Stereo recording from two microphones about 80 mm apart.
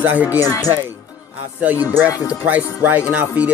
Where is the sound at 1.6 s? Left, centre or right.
Right.